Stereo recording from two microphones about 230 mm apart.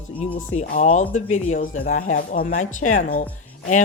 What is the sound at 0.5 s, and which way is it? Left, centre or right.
Speech, left.